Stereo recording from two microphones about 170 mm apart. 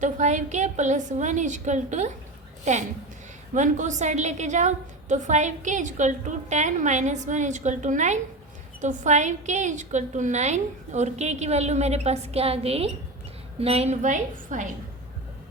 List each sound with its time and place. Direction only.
0.0 s a woman's voice: 45° right (ahead or behind)
3.5 s a woman's voice: 45° right (ahead or behind)